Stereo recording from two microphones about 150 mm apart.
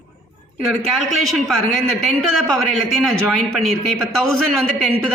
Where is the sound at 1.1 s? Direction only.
Centre (ahead or behind).